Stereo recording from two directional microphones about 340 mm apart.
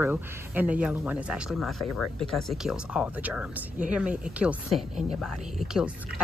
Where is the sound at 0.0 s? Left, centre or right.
Centre.